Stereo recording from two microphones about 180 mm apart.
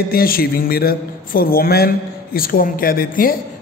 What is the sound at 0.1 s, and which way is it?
A man's voice, 55° left (ahead or behind).